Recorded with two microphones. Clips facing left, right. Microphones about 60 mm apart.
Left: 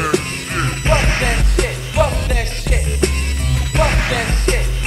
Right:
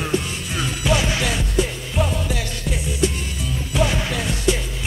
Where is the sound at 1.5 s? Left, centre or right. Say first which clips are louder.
Left 3 dB; left.